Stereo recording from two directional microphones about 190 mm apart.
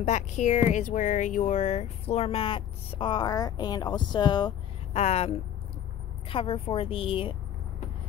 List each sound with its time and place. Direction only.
0.0 s a woman's voice: 40° left (ahead or behind); by 4.6 s 25° left (ahead or behind)
4.9 s a woman's voice: 35° left (ahead or behind)